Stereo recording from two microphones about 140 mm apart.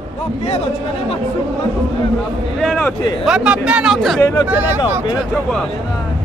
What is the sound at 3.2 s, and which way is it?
Speech, 5° right (ahead or behind).